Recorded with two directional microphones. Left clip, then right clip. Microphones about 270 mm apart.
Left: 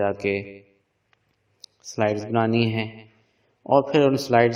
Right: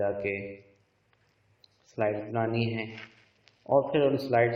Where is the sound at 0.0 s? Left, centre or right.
Left.